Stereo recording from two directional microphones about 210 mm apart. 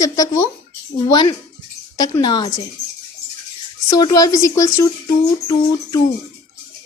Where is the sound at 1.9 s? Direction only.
20° left (ahead or behind).